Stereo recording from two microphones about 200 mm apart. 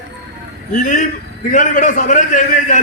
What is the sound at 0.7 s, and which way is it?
A man's voice, 40° left (ahead or behind).